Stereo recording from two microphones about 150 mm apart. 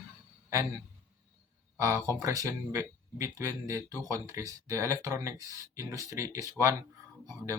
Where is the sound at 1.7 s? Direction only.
20° right (ahead or behind).